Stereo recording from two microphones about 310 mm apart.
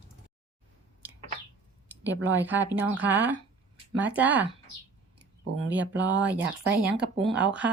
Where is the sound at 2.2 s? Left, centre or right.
Centre.